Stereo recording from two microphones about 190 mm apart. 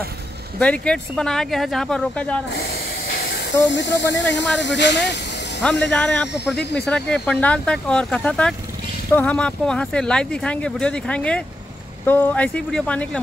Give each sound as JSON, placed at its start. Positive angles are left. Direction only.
{"t": 0.6, "sound": "speech", "side_deg": 5}
{"t": 2.5, "sound": "hiss", "side_deg": 55}
{"t": 3.6, "sound": "speech", "side_deg": 70}
{"t": 5.9, "sound": "speech", "side_deg": 5}